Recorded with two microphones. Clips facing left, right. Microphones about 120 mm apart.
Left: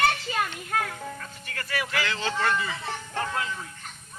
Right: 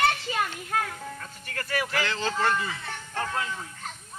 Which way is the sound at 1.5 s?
40° right (ahead or behind).